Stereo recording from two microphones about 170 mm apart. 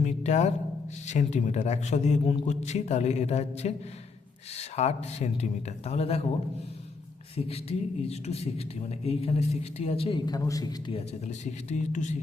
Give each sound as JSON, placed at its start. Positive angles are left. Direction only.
{"t": 0.0, "sound": "a sound", "side_deg": 40}
{"t": 1.0, "sound": "a man's voice", "side_deg": 45}
{"t": 7.3, "sound": "a man's voice", "side_deg": 35}
{"t": 11.3, "sound": "speech", "side_deg": 45}